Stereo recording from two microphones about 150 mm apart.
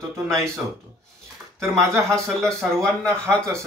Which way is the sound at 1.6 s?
20° right (ahead or behind).